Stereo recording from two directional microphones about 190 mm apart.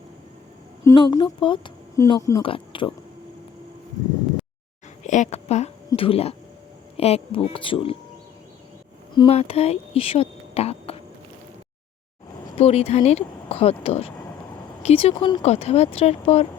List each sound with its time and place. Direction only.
0.9 s speech: 20° left (ahead or behind)
5.0 s a woman's voice: 40° left (ahead or behind)
9.1 s speech: 30° left (ahead or behind)
12.5 s speech: 35° left (ahead or behind)